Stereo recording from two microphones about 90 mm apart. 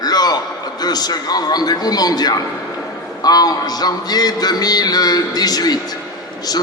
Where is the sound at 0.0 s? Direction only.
50° left (ahead or behind).